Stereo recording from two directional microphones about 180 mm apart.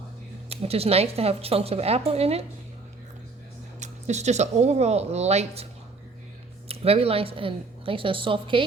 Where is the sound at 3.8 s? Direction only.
40° right (ahead or behind).